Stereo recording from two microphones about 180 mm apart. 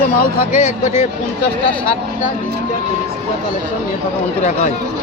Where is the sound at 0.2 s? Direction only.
50° left (ahead or behind).